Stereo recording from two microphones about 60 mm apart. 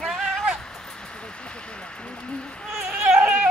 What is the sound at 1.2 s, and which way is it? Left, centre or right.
Vehicle, centre.